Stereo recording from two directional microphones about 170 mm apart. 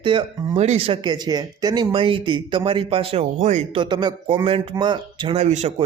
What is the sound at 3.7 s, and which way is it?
A man's voice, 25° right (ahead or behind).